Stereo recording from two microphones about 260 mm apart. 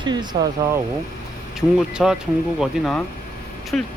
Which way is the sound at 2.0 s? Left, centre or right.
Centre.